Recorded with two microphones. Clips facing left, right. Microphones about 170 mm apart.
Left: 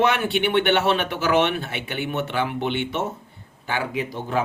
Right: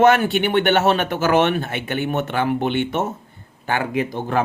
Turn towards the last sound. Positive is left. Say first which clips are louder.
# right 4 dB
turn(degrees=-55)  # may be behind; listen again after turning